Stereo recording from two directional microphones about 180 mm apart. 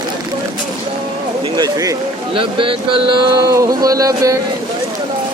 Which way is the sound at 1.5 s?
20° right (ahead or behind).